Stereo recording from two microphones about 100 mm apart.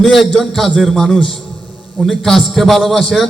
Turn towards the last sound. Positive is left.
turn(degrees=0)  # may be behind; listen again after turning